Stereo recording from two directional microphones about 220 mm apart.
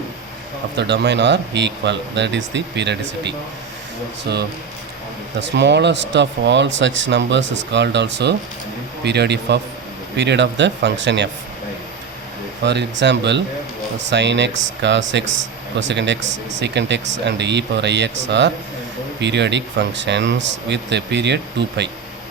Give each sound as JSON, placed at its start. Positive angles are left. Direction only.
{"t": 0.8, "sound": "speech", "side_deg": -50}
{"t": 12.6, "sound": "speech", "side_deg": -50}